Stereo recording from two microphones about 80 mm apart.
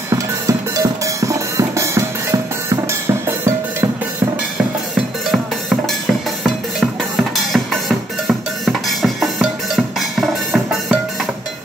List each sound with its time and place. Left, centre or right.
0.1 s music: right
4.9 s music: centre